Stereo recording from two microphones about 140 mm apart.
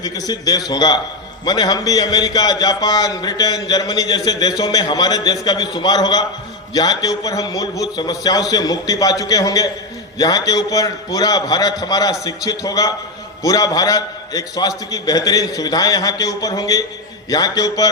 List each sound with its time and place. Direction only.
0.0 s a man's voice: 25° left (ahead or behind)